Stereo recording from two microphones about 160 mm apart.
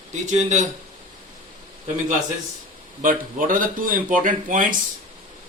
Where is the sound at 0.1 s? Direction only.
50° right (ahead or behind).